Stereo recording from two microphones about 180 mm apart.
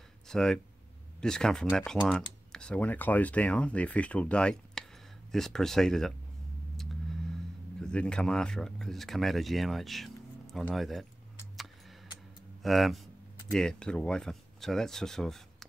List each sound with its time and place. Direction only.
0.3 s speech: 5° left (ahead or behind)
7.8 s speech: 5° left (ahead or behind)
12.6 s speech: centre (ahead or behind)